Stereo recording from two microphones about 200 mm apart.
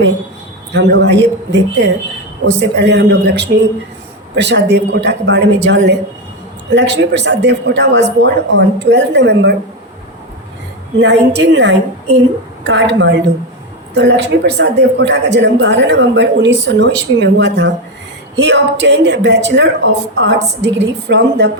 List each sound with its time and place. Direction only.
0.7 s a woman's voice: 60° right (ahead or behind)
11.0 s a woman's voice: 60° right (ahead or behind)